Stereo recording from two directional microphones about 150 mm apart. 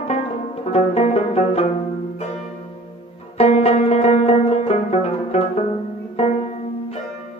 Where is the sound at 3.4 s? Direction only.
45° left (ahead or behind).